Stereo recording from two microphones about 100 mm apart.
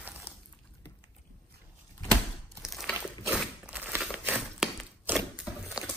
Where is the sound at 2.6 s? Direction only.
Centre (ahead or behind).